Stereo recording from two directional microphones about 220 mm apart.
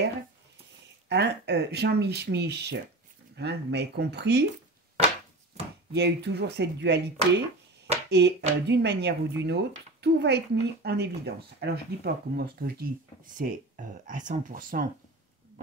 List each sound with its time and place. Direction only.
1.0 s speech: 50° right (ahead or behind)
5.9 s speech: 50° right (ahead or behind)